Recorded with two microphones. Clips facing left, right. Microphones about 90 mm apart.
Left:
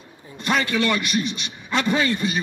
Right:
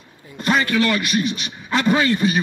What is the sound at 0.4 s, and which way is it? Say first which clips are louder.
A man's voice: right 3 dB; 50° right (ahead or behind).